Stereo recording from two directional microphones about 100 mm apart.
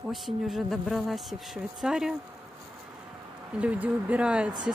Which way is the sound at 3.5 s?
10° right (ahead or behind).